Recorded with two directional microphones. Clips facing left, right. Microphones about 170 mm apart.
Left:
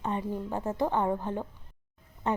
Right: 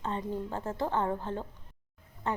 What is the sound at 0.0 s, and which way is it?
Speech, 15° left (ahead or behind).